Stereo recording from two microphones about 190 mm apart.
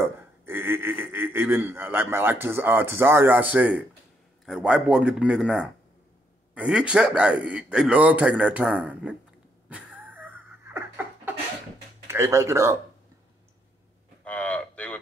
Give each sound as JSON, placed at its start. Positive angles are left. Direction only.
{"t": 0.0, "sound": "a man's voice", "side_deg": -10}
{"t": 9.7, "sound": "a sound", "side_deg": -5}
{"t": 12.1, "sound": "a man's voice", "side_deg": -15}
{"t": 14.2, "sound": "cattle", "side_deg": 5}